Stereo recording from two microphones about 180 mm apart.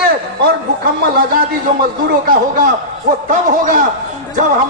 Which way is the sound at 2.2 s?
50° right (ahead or behind).